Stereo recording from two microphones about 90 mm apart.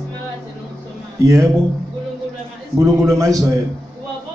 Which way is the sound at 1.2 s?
35° right (ahead or behind).